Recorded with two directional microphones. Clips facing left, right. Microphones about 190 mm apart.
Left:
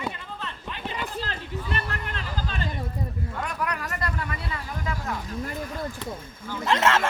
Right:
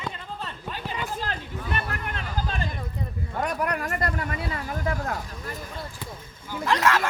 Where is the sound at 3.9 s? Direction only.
50° right (ahead or behind).